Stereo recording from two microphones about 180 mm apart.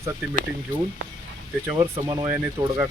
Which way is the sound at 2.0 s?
15° right (ahead or behind).